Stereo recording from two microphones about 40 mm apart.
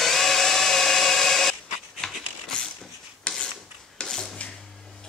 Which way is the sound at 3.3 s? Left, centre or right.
Left.